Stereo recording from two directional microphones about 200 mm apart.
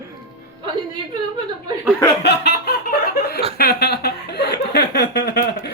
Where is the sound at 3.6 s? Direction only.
50° left (ahead or behind).